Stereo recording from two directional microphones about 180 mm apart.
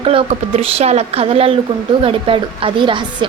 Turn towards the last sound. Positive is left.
turn(degrees=-25)  # may be behind; listen again after turning